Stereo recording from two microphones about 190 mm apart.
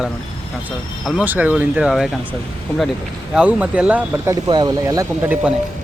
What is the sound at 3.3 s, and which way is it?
Speech, 5° right (ahead or behind).